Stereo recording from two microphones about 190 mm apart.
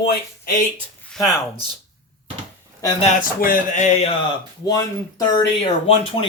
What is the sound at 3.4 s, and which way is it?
Speech, 45° left (ahead or behind).